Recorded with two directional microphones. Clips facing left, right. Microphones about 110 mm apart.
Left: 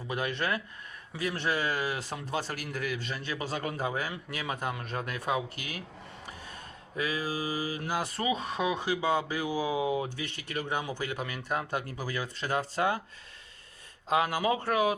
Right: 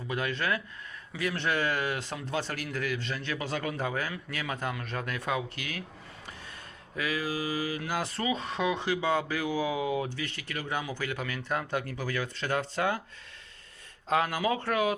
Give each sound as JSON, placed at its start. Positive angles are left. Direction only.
{"t": 0.1, "sound": "speech", "side_deg": 20}
{"t": 2.2, "sound": "speech", "side_deg": 15}
{"t": 3.5, "sound": "speech", "side_deg": 35}
{"t": 3.8, "sound": "speech", "side_deg": 15}
{"t": 6.9, "sound": "speech", "side_deg": 30}
{"t": 7.3, "sound": "speech", "side_deg": 20}
{"t": 14.1, "sound": "speech", "side_deg": 15}